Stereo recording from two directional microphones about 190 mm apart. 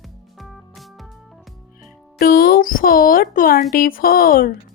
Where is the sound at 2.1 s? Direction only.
50° left (ahead or behind).